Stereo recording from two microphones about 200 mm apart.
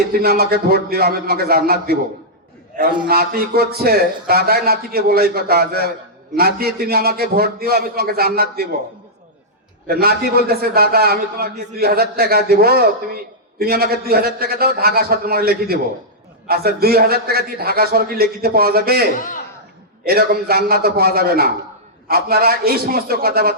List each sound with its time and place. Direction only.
0.1 s a man's voice: 50° right (ahead or behind)
3.1 s a man's voice: 50° right (ahead or behind)
9.8 s a man's voice: 50° right (ahead or behind)
19.1 s a man's voice: 40° left (ahead or behind)
20.1 s a man's voice: 50° right (ahead or behind)